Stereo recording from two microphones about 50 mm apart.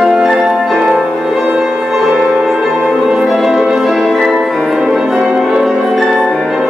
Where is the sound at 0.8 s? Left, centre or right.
Right.